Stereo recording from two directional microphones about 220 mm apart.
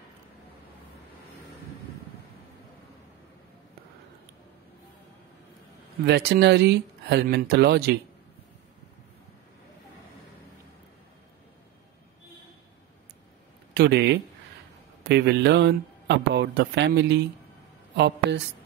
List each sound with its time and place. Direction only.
6.0 s a man's voice: 50° right (ahead or behind)
13.7 s speech: 50° right (ahead or behind)
15.0 s a man's voice: 50° right (ahead or behind)